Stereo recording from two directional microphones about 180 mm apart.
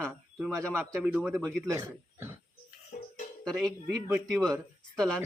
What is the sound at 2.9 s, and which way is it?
Music, 45° left (ahead or behind).